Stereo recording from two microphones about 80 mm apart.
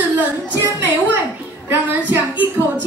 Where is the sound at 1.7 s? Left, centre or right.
Right.